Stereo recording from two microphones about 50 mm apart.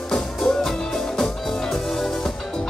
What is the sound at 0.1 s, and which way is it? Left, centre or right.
Music, centre.